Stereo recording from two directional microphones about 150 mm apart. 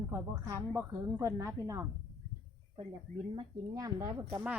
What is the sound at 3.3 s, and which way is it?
Speech, 25° right (ahead or behind).